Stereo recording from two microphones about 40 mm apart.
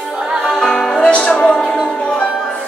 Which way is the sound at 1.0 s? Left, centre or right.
Left.